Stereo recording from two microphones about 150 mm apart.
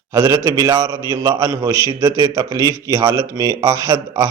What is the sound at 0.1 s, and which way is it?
A man's voice, 25° right (ahead or behind).